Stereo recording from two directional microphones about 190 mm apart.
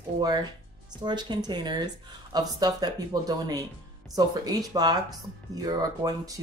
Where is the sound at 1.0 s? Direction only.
25° right (ahead or behind).